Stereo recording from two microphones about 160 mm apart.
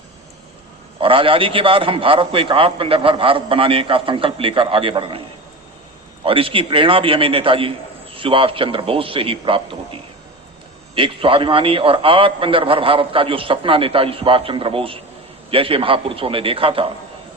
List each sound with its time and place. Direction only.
1.0 s a man's voice: 35° right (ahead or behind)
6.2 s a man's voice: 35° right (ahead or behind)